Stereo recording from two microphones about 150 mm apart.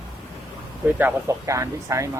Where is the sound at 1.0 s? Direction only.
15° right (ahead or behind).